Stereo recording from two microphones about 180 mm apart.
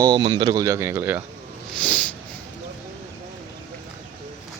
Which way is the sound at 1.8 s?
5° left (ahead or behind).